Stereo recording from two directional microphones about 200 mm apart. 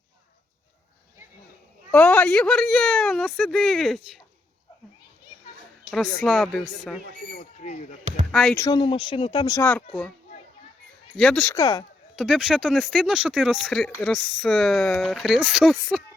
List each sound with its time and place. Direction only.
1.9 s a woman's voice: 5° left (ahead or behind)
6.1 s a woman's voice: centre (ahead or behind)
7.6 s speech: 35° left (ahead or behind)
8.3 s speech: centre (ahead or behind)
8.5 s speech: 20° left (ahead or behind)
9.6 s speech: 5° left (ahead or behind)
11.2 s a woman's voice: 5° left (ahead or behind)
11.5 s speech: 20° left (ahead or behind)
12.1 s a woman's voice: centre (ahead or behind)